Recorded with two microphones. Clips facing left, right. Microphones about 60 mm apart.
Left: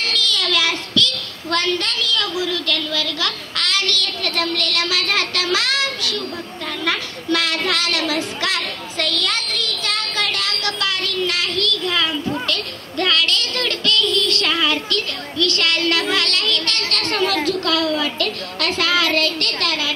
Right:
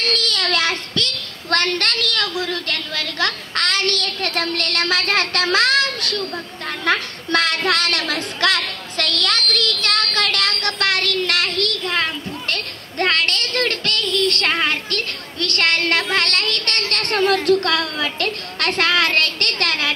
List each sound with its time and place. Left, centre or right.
0.0 s a child's voice: right
6.8 s a sound: right
17.5 s a woman's voice: right